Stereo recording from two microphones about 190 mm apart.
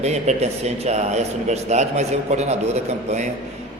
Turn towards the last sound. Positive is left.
turn(degrees=-35)  # may be behind; listen again after turning